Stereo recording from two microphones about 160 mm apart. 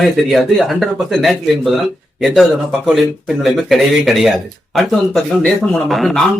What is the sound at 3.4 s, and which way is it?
Speech, centre (ahead or behind).